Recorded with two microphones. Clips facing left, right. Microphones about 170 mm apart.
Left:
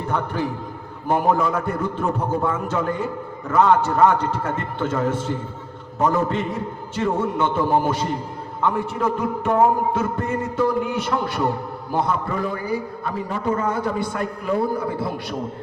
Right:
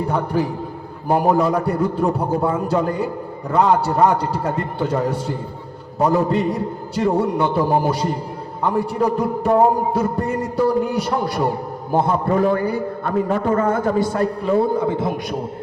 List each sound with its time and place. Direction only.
0.0 s a man's voice: 40° right (ahead or behind)
12.4 s a man's voice: 60° right (ahead or behind); by 15.4 s 20° right (ahead or behind)